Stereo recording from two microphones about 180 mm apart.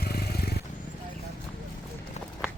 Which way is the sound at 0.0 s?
60° left (ahead or behind).